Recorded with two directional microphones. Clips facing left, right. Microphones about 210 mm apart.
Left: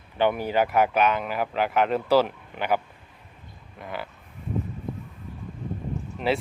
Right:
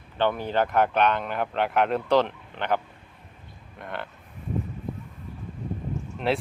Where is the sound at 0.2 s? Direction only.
10° left (ahead or behind).